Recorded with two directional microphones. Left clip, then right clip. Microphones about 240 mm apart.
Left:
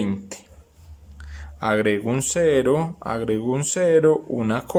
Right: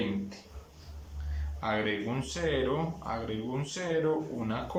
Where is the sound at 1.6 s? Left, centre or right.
Left.